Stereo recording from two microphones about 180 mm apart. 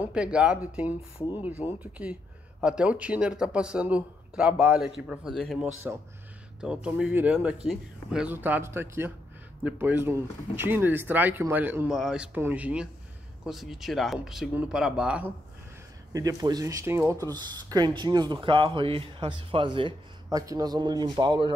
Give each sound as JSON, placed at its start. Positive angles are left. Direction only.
{"t": 0.0, "sound": "speech", "side_deg": -5}
{"t": 16.1, "sound": "speech", "side_deg": -20}